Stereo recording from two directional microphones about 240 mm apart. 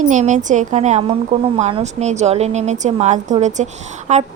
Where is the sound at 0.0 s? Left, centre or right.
Right.